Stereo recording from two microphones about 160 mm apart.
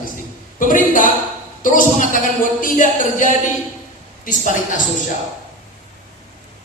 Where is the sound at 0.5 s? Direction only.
55° left (ahead or behind).